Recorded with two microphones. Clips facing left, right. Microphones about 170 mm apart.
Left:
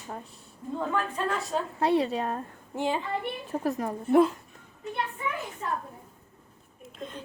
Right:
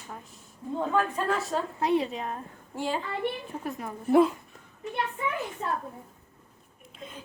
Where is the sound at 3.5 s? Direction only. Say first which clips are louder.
Left 6 dB; 40° left (ahead or behind).